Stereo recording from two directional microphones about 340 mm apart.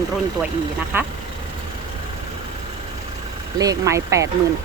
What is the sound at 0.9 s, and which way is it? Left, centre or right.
Speech, centre.